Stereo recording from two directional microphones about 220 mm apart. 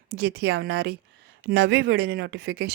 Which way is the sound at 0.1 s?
45° right (ahead or behind).